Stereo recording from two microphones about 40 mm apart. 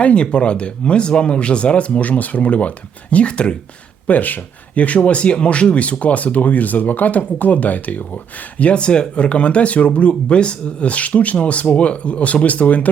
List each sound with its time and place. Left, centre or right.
0.0 s speech: left
4.0 s speech: left
8.7 s speech: left